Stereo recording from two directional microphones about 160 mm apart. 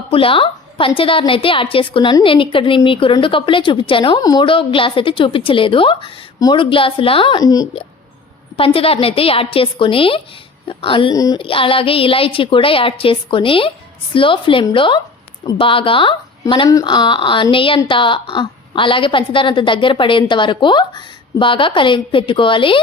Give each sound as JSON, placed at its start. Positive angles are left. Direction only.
{"t": 0.1, "sound": "a woman's voice", "side_deg": 35}
{"t": 8.5, "sound": "a woman's voice", "side_deg": 35}
{"t": 11.1, "sound": "speech", "side_deg": 20}
{"t": 11.4, "sound": "a woman's voice", "side_deg": 35}